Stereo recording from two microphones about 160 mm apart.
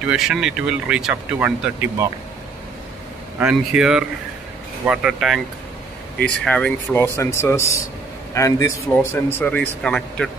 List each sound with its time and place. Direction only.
0.0 s speech: 5° right (ahead or behind)
3.3 s speech: 5° right (ahead or behind)
6.2 s speech: 5° left (ahead or behind)